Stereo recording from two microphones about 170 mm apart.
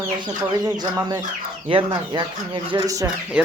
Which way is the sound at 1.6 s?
25° right (ahead or behind).